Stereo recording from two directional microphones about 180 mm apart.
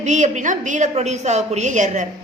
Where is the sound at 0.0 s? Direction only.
40° right (ahead or behind).